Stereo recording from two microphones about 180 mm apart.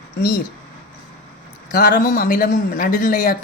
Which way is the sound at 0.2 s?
60° left (ahead or behind).